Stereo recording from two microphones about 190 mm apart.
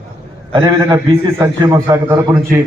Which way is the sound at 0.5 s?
20° right (ahead or behind).